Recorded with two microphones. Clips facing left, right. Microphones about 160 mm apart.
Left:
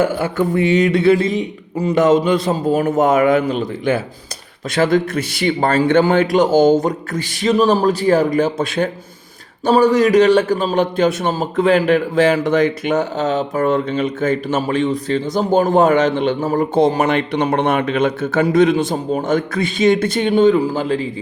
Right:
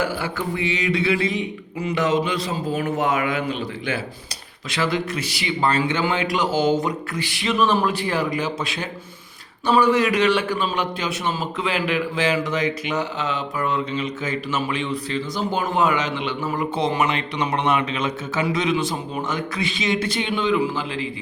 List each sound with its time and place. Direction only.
0.0 s a man's voice: 50° left (ahead or behind)